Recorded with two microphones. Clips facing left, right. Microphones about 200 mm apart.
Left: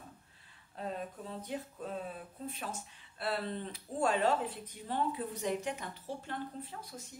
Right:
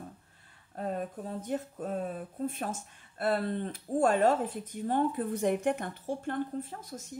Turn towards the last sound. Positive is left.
turn(degrees=-45)  # may be behind; listen again after turning